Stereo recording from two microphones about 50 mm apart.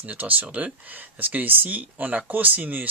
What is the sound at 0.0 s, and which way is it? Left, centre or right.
Speech, right.